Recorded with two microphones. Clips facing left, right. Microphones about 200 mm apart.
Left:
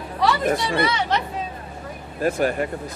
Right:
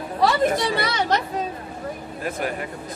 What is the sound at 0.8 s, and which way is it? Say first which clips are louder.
Speech: even; 40° right (ahead or behind).